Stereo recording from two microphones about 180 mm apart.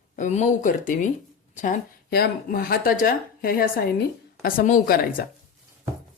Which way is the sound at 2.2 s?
55° left (ahead or behind).